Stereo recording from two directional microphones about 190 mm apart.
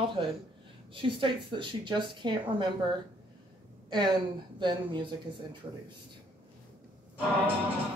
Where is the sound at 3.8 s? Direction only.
25° right (ahead or behind).